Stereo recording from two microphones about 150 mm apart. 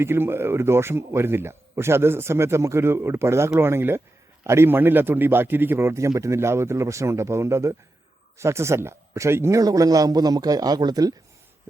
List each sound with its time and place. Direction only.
0.0 s a man's voice: 15° right (ahead or behind)